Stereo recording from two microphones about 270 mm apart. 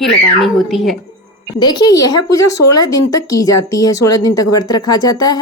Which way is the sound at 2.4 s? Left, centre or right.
Left.